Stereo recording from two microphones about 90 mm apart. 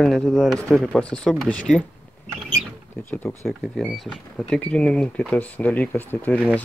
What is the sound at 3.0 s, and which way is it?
Speech, 20° left (ahead or behind).